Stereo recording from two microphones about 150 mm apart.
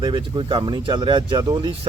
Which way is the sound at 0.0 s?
30° right (ahead or behind).